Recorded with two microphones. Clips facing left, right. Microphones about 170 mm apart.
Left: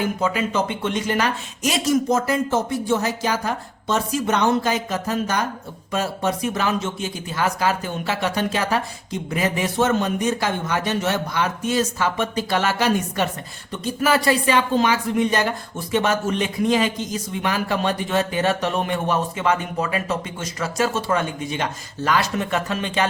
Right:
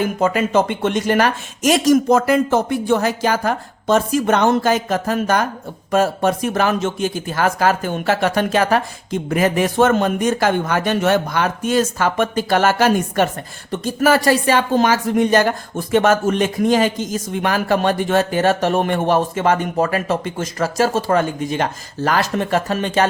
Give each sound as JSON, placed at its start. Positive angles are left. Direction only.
{"t": 0.2, "sound": "speech", "side_deg": -50}
{"t": 1.8, "sound": "speech", "side_deg": -75}
{"t": 19.0, "sound": "speech", "side_deg": -90}
{"t": 19.4, "sound": "speech", "side_deg": -50}